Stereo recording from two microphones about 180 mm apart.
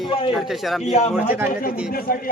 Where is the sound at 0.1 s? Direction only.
30° left (ahead or behind).